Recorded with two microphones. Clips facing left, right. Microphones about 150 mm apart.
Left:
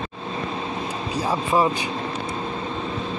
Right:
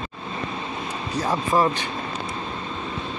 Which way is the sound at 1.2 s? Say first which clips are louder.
Even; 5° left (ahead or behind).